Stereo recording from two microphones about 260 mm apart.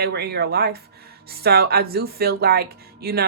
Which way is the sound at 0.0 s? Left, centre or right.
Right.